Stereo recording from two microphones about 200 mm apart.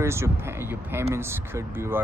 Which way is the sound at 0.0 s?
15° right (ahead or behind).